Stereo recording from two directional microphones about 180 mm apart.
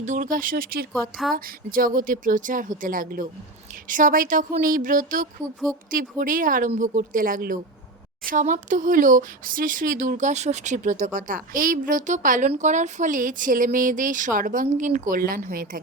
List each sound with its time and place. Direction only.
0.0 s speech: 45° right (ahead or behind)